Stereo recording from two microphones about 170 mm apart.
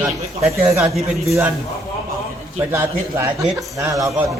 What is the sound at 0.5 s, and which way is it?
Speech, 15° right (ahead or behind).